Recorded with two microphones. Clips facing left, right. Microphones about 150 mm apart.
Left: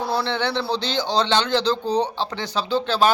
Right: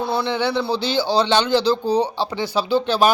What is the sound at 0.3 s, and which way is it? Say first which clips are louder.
A man's voice: right 3 dB; 10° right (ahead or behind).